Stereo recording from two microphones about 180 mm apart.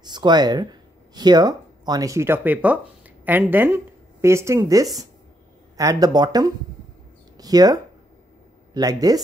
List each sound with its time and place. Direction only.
0.0 s speech: 25° right (ahead or behind)